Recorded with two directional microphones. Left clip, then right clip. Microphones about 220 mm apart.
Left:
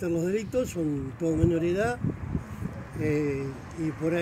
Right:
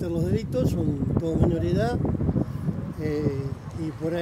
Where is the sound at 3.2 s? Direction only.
55° right (ahead or behind).